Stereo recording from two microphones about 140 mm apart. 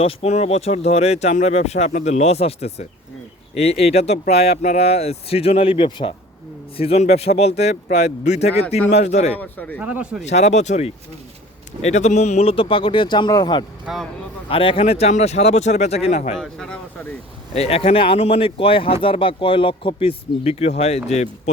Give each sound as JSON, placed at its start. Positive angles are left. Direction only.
{"t": 0.0, "sound": "speech", "side_deg": 45}
{"t": 4.5, "sound": "speech", "side_deg": 60}
{"t": 9.4, "sound": "speech", "side_deg": 10}
{"t": 9.8, "sound": "speech", "side_deg": -10}
{"t": 10.2, "sound": "speech", "side_deg": 50}
{"t": 13.8, "sound": "speech", "side_deg": 0}
{"t": 14.5, "sound": "speech", "side_deg": 40}
{"t": 16.4, "sound": "speech", "side_deg": 5}
{"t": 17.5, "sound": "speech", "side_deg": 45}